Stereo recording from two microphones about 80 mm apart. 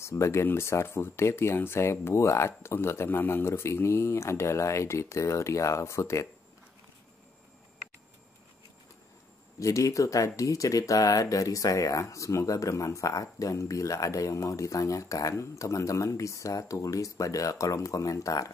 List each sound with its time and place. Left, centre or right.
0.0 s speech: left
9.6 s speech: left